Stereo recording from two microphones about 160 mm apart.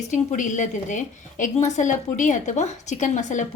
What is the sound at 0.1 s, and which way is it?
A woman's voice, 50° left (ahead or behind).